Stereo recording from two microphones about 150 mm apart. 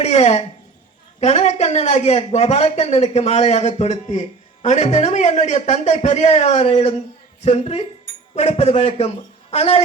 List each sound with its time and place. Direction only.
0.0 s speech: 45° left (ahead or behind)